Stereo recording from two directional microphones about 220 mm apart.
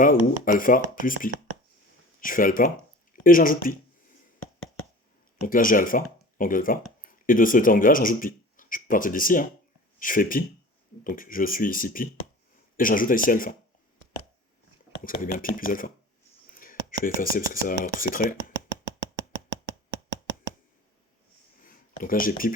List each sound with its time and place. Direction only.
0.0 s speech: 40° left (ahead or behind)
5.4 s speech: 40° left (ahead or behind)
15.0 s speech: 40° left (ahead or behind)
21.6 s a sound: 40° left (ahead or behind)